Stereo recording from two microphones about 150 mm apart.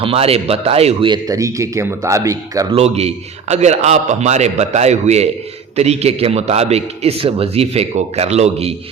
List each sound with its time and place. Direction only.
0.0 s speech: 40° right (ahead or behind)
1.1 s a man's voice: 20° right (ahead or behind)
2.7 s a man's voice: 45° right (ahead or behind)